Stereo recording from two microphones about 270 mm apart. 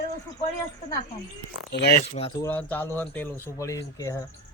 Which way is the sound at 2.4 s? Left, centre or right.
Centre.